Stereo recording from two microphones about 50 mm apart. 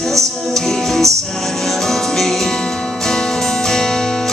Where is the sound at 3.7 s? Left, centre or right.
Centre.